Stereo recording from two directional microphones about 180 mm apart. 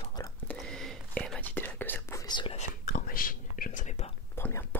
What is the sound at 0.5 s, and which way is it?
Whispering, 5° left (ahead or behind).